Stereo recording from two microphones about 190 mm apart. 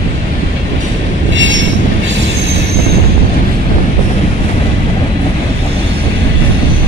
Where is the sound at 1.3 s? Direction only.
80° right.